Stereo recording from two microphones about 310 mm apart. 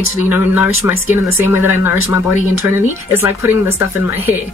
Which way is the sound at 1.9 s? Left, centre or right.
Left.